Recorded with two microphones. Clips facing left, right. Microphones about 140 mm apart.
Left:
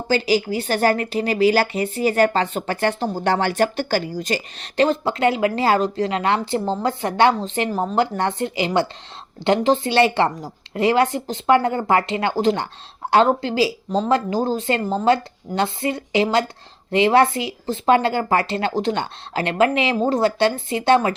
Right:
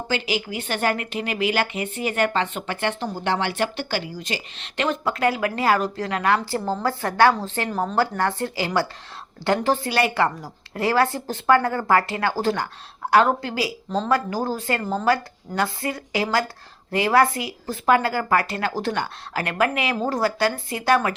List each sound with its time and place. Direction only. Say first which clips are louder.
0.1 s speech: left 8 dB; 35° left (ahead or behind)